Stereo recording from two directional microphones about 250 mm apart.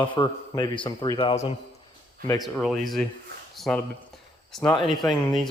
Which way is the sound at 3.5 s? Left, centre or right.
Centre.